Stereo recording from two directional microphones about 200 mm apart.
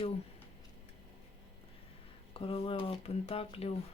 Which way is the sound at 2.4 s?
25° left (ahead or behind).